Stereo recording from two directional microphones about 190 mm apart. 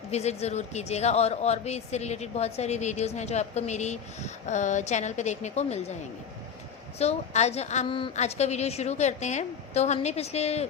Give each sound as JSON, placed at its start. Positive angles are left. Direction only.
{"t": 0.1, "sound": "speech", "side_deg": 35}
{"t": 7.0, "sound": "speech", "side_deg": 35}